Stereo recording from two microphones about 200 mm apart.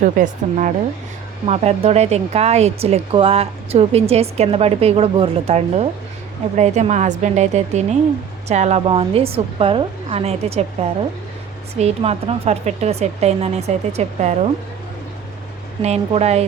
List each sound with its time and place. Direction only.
0.0 s a woman's voice: 40° right (ahead or behind)
15.8 s speech: 35° right (ahead or behind)